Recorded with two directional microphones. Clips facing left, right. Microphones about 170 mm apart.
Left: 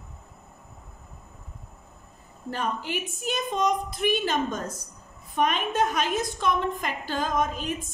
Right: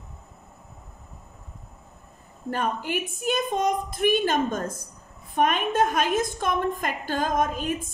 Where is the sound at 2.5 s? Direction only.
50° right (ahead or behind).